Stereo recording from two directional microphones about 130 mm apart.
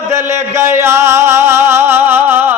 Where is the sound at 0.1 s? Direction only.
20° right (ahead or behind).